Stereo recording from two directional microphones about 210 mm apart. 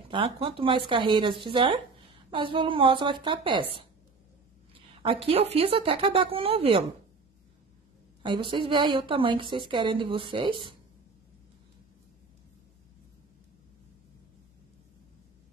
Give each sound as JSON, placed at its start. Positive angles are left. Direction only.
{"t": 0.1, "sound": "a woman's voice", "side_deg": -25}
{"t": 4.7, "sound": "a woman's voice", "side_deg": -25}
{"t": 8.2, "sound": "a woman's voice", "side_deg": -25}